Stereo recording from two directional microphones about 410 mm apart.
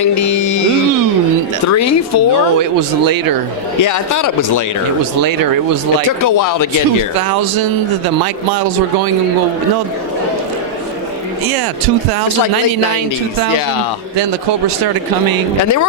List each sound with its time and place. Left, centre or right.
0.0 s music: left
1.6 s speech: left
2.7 s speech: right
3.8 s speech: left
6.1 s speech: left
7.2 s speech: right
15.6 s speech: left